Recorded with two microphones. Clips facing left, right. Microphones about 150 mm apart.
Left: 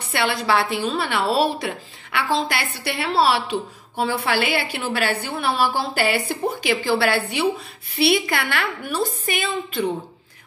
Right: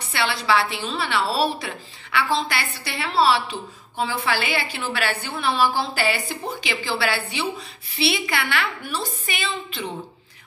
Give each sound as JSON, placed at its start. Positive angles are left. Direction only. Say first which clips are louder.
{"t": 0.1, "sound": "a woman's voice", "louder": "left 1 dB", "side_deg": 50}